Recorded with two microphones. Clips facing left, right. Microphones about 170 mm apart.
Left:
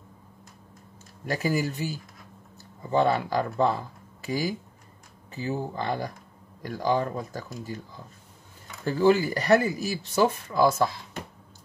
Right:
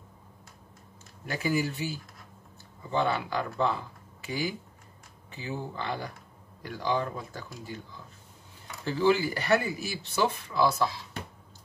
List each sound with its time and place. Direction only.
1.2 s speech: 40° left (ahead or behind)
8.8 s speech: 45° left (ahead or behind)